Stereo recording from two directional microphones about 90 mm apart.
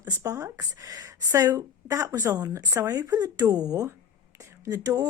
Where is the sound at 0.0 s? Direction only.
20° right (ahead or behind).